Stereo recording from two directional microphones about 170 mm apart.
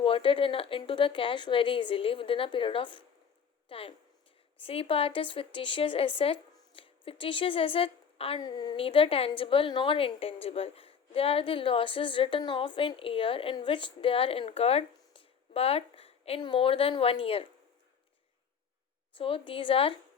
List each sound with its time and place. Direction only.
0.0 s a woman's voice: 30° left (ahead or behind)
19.1 s a woman's voice: 30° left (ahead or behind)